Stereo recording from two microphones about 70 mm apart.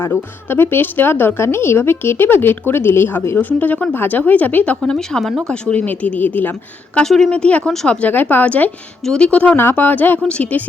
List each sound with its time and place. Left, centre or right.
0.0 s speech: left
4.8 s a woman's voice: centre; by 6.5 s left
6.9 s a woman's voice: centre
9.6 s speech: left